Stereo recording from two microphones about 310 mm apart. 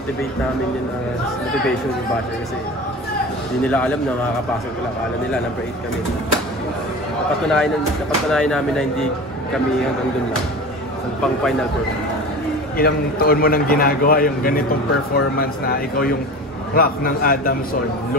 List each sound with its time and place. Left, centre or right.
3.6 s a man's voice: centre
7.4 s a man's voice: centre
12.7 s a man's voice: left